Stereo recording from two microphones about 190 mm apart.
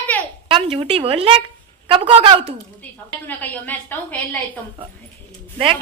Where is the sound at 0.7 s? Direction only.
30° right (ahead or behind).